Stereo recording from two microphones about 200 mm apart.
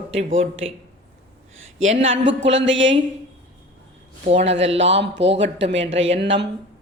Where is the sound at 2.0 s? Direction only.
65° right (ahead or behind).